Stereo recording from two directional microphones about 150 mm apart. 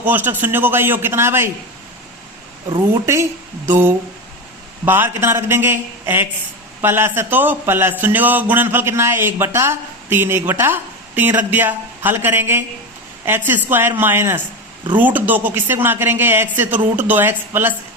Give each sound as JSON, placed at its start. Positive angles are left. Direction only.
{"t": 0.0, "sound": "a man's voice", "side_deg": -10}
{"t": 2.7, "sound": "a man's voice", "side_deg": -20}